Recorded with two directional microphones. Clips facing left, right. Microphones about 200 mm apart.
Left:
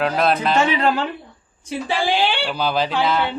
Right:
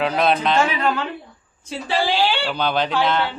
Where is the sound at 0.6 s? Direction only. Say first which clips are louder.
Left 2 dB; 30° left (ahead or behind).